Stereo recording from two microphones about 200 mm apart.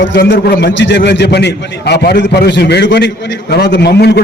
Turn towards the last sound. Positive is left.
turn(degrees=55)  # may be behind; listen again after turning